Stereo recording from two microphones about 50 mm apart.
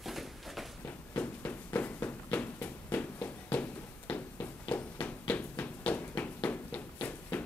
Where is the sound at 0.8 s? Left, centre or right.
Left.